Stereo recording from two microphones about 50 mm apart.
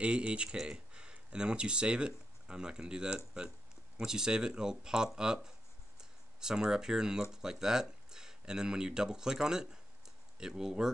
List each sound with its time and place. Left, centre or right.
0.0 s speech: right